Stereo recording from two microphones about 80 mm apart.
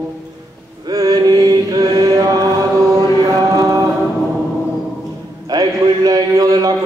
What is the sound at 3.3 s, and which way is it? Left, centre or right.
Chant, right.